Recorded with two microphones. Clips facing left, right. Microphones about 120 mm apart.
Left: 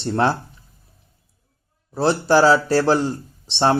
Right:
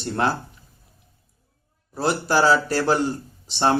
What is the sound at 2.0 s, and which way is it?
Speech, 30° left (ahead or behind).